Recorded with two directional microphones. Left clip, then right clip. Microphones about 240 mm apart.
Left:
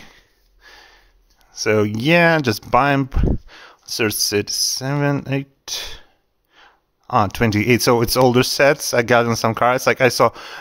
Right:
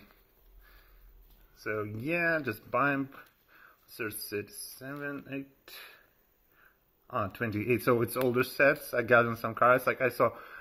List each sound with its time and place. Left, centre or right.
1.5 s speech: left